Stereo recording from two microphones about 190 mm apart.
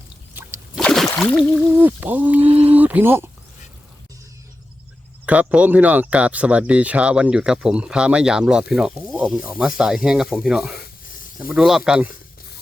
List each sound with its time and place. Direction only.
0.8 s a sound: 5° left (ahead or behind)
1.2 s speech: centre (ahead or behind)
5.2 s speech: 5° right (ahead or behind)